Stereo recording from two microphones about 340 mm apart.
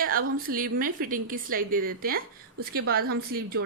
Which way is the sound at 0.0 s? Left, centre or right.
Right.